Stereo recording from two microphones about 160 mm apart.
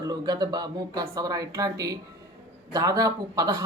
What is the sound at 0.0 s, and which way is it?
Speech, 25° right (ahead or behind).